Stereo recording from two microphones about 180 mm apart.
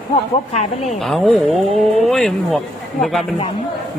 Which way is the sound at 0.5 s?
40° left (ahead or behind).